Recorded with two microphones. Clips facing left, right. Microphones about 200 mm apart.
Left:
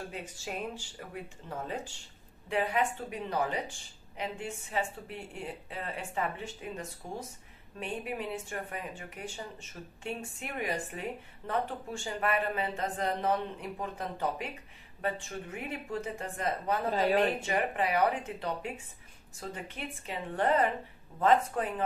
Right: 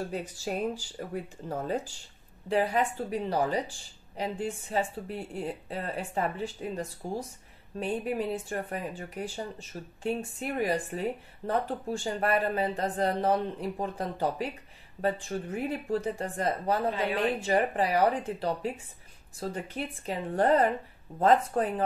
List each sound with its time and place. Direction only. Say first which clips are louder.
0.1 s speech: right 6 dB; 40° right (ahead or behind)
16.9 s speech: left 3 dB; 40° left (ahead or behind)
17.4 s speech: right 5 dB; 35° right (ahead or behind)